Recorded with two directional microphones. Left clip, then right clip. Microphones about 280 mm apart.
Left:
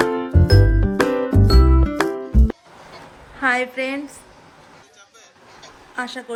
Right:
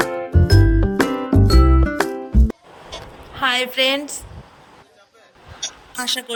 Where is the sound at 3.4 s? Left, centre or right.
Right.